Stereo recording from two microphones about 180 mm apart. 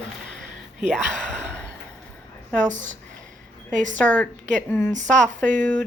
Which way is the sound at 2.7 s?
45° right (ahead or behind).